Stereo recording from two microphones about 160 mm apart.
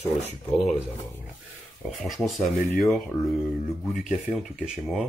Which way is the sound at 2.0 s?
Centre (ahead or behind).